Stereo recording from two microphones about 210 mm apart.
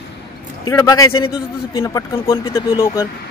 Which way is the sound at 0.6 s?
20° left (ahead or behind).